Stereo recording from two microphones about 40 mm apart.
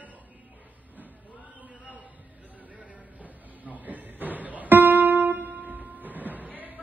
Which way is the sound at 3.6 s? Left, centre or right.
Right.